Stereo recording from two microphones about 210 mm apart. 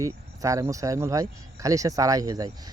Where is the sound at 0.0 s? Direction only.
15° right (ahead or behind).